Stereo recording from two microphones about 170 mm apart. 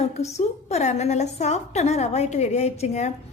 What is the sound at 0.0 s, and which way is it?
A woman's voice, 40° left (ahead or behind).